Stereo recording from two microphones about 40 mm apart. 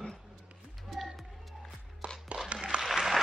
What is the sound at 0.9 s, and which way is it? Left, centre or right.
Music, centre.